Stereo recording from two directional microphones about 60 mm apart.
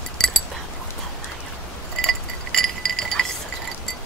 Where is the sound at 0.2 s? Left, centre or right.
Centre.